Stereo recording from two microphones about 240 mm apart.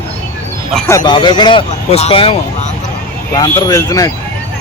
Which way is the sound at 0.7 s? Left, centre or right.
Centre.